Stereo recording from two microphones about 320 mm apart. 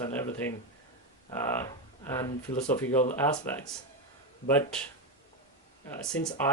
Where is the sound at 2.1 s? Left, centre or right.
Centre.